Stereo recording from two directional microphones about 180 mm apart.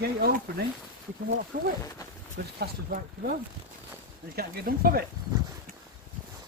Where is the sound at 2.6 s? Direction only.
55° right (ahead or behind).